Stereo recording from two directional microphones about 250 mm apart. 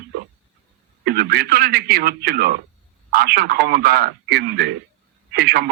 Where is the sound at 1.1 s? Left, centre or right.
Right.